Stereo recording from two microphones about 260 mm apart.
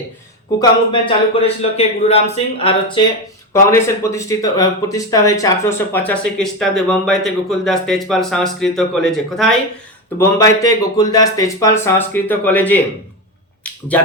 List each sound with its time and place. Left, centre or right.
0.6 s speech: centre
10.2 s speech: centre